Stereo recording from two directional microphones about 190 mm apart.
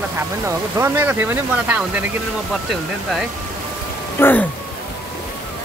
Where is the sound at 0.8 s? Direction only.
10° right (ahead or behind).